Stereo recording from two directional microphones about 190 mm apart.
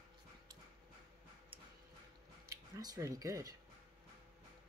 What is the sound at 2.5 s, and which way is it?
Speech, 20° right (ahead or behind).